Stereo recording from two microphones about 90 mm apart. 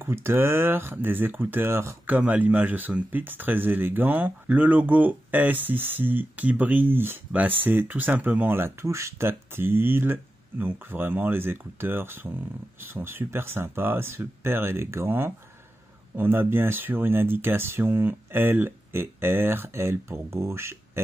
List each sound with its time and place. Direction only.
0.0 s speech: 25° right (ahead or behind)
2.0 s speech: 20° right (ahead or behind)